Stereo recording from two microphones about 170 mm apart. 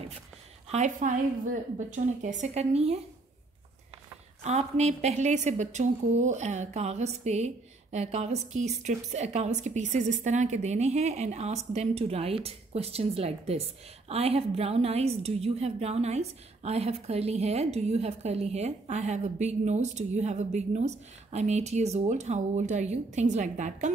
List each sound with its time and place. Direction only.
0.7 s a woman's voice: 45° right (ahead or behind)
4.4 s a woman's voice: 40° right (ahead or behind)